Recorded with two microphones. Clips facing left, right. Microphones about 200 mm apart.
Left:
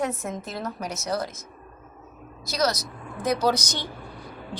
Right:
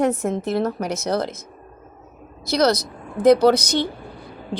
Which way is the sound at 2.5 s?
60° right (ahead or behind).